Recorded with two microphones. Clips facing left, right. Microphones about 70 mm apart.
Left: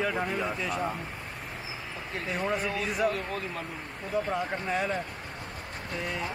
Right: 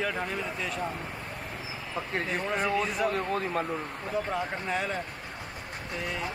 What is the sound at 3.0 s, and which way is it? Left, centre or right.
Speech, right.